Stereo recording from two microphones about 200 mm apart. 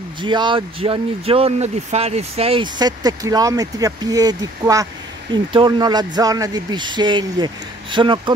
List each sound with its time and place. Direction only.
0.2 s speech: 25° right (ahead or behind)